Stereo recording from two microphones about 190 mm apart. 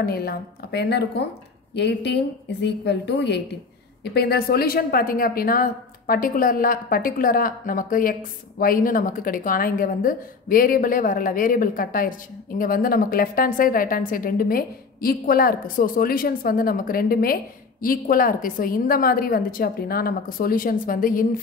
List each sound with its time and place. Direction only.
0.0 s a woman's voice: 55° left (ahead or behind)